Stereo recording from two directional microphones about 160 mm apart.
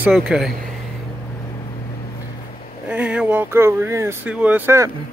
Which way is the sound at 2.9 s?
10° right (ahead or behind).